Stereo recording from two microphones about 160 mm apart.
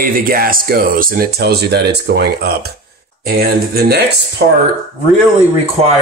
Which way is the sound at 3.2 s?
65° right (ahead or behind).